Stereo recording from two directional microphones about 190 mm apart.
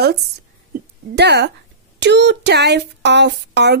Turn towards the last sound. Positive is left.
turn(degrees=-60)  # may be behind; listen again after turning